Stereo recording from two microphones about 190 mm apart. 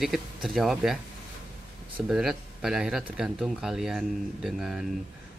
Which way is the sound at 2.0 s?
Centre (ahead or behind).